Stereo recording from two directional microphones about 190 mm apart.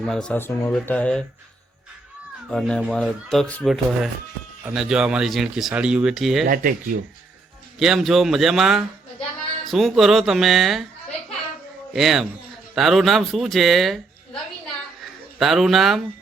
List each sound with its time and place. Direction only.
0.0 s speech: 5° left (ahead or behind)
2.5 s speech: 5° left (ahead or behind)
6.5 s speech: 45° right (ahead or behind)
7.8 s speech: centre (ahead or behind)
11.9 s speech: centre (ahead or behind)
15.0 s speech: centre (ahead or behind)